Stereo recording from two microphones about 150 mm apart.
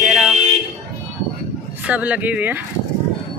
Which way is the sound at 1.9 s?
10° right (ahead or behind).